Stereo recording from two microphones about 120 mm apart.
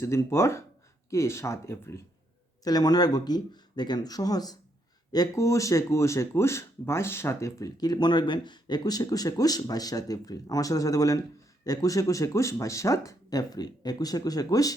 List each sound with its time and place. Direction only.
0.0 s speech: 20° left (ahead or behind)
2.6 s speech: 35° left (ahead or behind)